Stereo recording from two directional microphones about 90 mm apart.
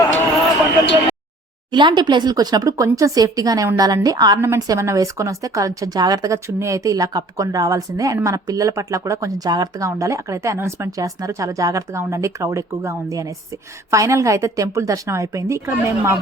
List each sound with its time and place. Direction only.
1.7 s speech: 55° right (ahead or behind)
4.4 s a woman's voice: 30° right (ahead or behind)
4.6 s a woman's voice: 40° right (ahead or behind)
9.8 s a woman's voice: 35° right (ahead or behind)